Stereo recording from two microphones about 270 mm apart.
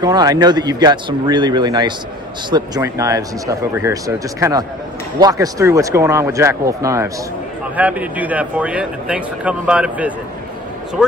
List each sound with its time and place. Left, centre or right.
0.0 s speech: centre